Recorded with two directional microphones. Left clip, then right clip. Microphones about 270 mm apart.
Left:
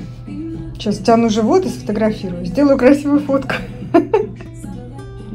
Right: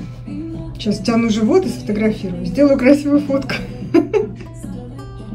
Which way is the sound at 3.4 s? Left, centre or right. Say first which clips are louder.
Left 2 dB; centre.